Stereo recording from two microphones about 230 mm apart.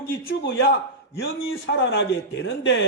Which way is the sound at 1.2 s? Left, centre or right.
Left.